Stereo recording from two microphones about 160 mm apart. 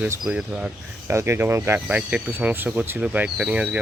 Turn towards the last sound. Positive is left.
turn(degrees=-10)  # may be behind; listen again after turning